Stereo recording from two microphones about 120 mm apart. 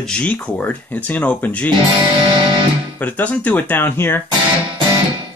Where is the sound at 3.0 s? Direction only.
15° left (ahead or behind).